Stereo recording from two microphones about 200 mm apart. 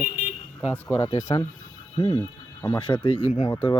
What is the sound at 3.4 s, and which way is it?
Speech, 10° left (ahead or behind).